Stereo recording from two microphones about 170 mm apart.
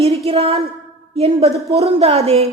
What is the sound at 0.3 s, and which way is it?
Speech, 35° right (ahead or behind).